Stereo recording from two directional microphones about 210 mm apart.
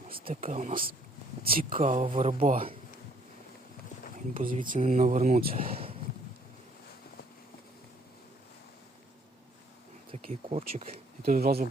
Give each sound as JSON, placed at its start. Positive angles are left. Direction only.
{"t": 0.4, "sound": "speech", "side_deg": -40}
{"t": 4.4, "sound": "speech", "side_deg": -40}
{"t": 10.2, "sound": "speech", "side_deg": -35}
{"t": 11.2, "sound": "speech", "side_deg": -45}